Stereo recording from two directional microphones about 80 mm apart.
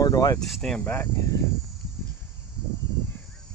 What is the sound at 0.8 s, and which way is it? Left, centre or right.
Speech, left.